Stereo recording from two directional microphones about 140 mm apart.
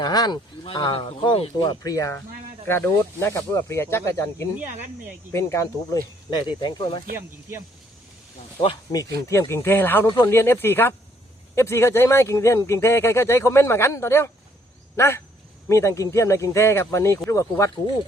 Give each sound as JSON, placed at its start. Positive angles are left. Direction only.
{"t": 0.0, "sound": "speech", "side_deg": 30}
{"t": 6.5, "sound": "speech", "side_deg": 30}
{"t": 8.6, "sound": "speech", "side_deg": 40}
{"t": 9.2, "sound": "speech", "side_deg": 20}